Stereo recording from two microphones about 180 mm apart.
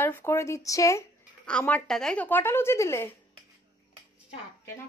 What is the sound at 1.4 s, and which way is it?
A woman's voice, 5° left (ahead or behind).